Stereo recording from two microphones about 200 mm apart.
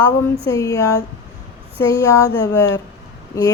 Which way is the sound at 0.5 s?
15° left (ahead or behind).